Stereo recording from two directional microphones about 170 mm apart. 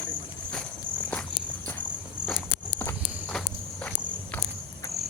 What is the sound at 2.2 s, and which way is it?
Walk, 10° left (ahead or behind).